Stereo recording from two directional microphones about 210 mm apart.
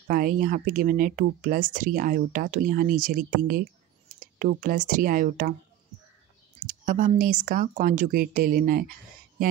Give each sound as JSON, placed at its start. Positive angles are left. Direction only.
{"t": 0.1, "sound": "speech", "side_deg": -45}
{"t": 6.6, "sound": "speech", "side_deg": -40}